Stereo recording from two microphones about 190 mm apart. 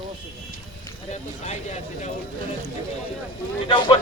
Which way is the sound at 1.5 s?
40° left (ahead or behind).